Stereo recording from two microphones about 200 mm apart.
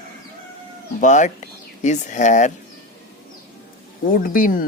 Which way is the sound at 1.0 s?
40° left (ahead or behind).